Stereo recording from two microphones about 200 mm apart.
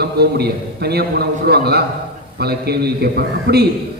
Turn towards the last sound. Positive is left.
turn(degrees=-50)  # may be behind; listen again after turning